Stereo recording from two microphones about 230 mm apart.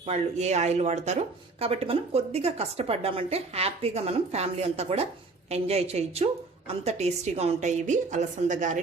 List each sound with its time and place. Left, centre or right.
0.0 s a woman's voice: right